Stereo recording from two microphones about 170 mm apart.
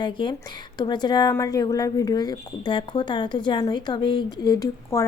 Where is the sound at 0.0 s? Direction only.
30° left (ahead or behind).